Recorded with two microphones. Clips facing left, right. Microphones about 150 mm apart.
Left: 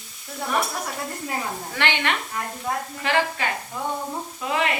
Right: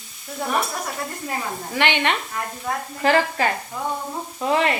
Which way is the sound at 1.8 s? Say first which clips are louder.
Right 4 dB; 15° right (ahead or behind).